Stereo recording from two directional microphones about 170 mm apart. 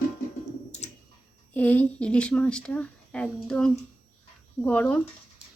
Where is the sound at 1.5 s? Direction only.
10° left (ahead or behind).